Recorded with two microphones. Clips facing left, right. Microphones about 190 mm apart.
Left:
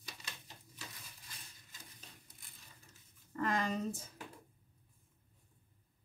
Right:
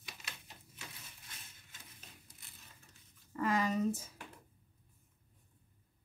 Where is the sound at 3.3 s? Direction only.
5° right (ahead or behind).